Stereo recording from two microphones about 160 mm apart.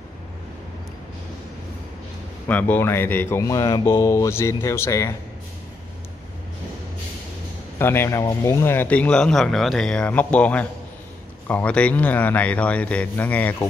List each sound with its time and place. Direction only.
2.4 s speech: 10° left (ahead or behind)
7.8 s speech: 15° left (ahead or behind)